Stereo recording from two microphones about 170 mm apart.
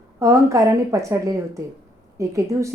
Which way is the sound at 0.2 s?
15° right (ahead or behind).